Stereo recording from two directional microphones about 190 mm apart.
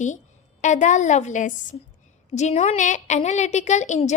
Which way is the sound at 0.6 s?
40° left (ahead or behind).